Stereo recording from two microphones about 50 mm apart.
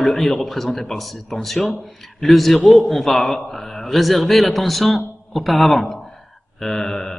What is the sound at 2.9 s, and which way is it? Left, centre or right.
A man's voice, centre.